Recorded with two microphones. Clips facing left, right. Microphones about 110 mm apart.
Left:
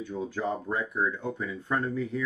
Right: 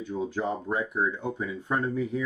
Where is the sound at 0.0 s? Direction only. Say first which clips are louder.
Right 2 dB; 20° right (ahead or behind).